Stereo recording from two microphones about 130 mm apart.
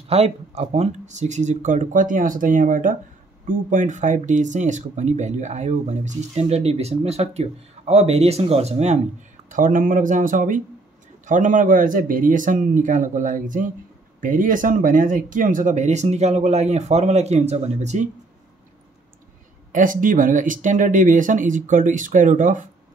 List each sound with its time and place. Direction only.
0.1 s speech: 55° right (ahead or behind); by 3.0 s 90° right
3.4 s speech: 70° right (ahead or behind)
9.5 s speech: 90° right
11.2 s speech: 80° right; by 18.0 s 60° right (ahead or behind)
19.7 s speech: 90° right